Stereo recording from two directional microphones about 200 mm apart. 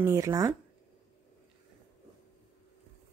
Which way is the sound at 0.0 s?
15° right (ahead or behind).